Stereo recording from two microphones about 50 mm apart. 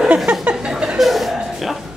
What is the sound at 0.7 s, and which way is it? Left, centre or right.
Chuckle, centre.